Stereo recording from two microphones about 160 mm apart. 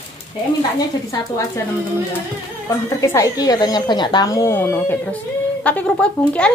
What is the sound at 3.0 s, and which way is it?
A woman's voice, 20° left (ahead or behind).